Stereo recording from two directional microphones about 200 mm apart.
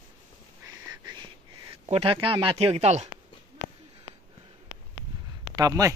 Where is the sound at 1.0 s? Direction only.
20° right (ahead or behind).